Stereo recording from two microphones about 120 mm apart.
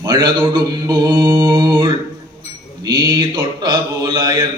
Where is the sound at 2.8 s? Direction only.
30° right (ahead or behind).